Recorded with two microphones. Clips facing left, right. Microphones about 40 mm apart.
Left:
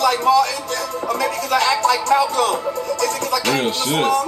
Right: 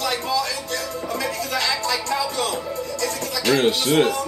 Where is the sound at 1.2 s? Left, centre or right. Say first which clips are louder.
Left 7 dB; left.